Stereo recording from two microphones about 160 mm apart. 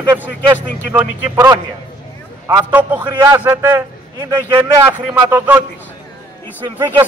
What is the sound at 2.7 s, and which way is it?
A man's voice, 10° right (ahead or behind).